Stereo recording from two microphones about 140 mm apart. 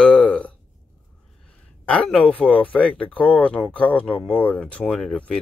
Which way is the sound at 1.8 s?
5° left (ahead or behind).